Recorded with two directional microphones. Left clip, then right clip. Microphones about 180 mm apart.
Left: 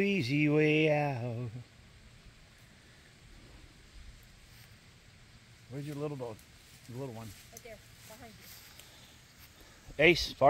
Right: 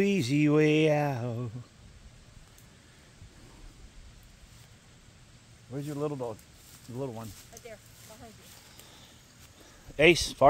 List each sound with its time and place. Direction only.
0.0 s speech: 15° right (ahead or behind)
5.7 s speech: 15° right (ahead or behind)
9.9 s speech: 10° right (ahead or behind)